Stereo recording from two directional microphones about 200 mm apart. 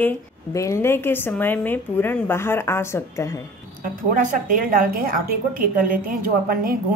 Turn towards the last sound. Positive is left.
turn(degrees=-45)  # may be behind; listen again after turning